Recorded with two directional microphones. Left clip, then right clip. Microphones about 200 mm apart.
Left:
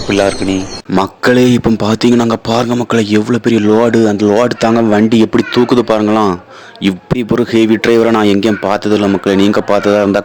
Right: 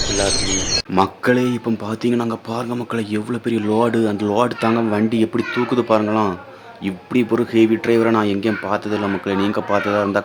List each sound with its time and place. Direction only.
0.9 s speech: 35° left (ahead or behind)